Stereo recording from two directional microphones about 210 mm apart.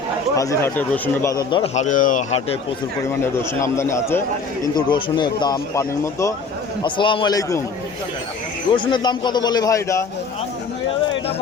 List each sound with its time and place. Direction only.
0.3 s a man's voice: 10° left (ahead or behind); by 2.6 s 35° left (ahead or behind)
3.6 s a man's voice: 15° left (ahead or behind)
8.7 s a man's voice: 20° left (ahead or behind)